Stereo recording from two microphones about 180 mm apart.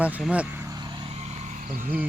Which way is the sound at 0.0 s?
5° right (ahead or behind).